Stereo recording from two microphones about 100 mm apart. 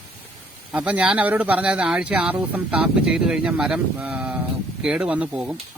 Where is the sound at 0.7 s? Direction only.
15° right (ahead or behind).